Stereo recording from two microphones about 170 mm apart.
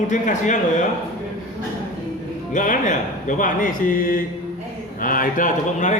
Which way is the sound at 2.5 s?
50° left (ahead or behind).